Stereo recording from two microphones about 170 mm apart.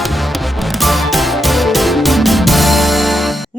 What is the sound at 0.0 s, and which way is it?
Music, centre (ahead or behind).